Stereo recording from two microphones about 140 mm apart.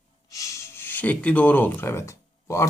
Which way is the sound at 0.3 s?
25° left (ahead or behind).